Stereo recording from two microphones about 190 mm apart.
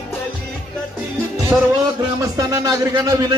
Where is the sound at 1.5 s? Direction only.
10° right (ahead or behind).